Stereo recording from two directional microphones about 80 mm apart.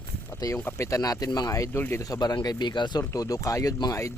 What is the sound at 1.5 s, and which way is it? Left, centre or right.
Speech, left.